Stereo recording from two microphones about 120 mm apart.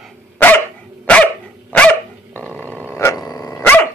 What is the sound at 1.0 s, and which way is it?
Dog, 10° left (ahead or behind).